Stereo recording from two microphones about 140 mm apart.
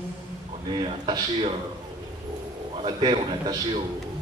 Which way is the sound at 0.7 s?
35° right (ahead or behind).